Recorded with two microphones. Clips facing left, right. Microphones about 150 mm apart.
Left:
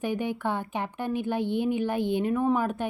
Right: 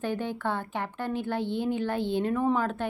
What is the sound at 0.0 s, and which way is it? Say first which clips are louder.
Speech: left 2 dB; 15° left (ahead or behind).